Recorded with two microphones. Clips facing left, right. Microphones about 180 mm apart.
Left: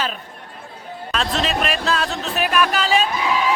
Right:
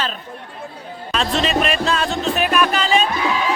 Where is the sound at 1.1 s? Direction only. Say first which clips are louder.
Right 2 dB; centre (ahead or behind).